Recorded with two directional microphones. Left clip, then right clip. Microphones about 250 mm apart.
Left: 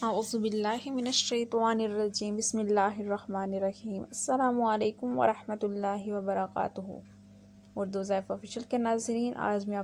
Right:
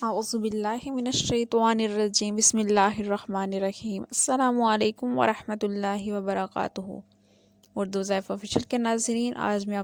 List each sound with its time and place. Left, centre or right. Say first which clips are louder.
0.1 s speech: right 2 dB; right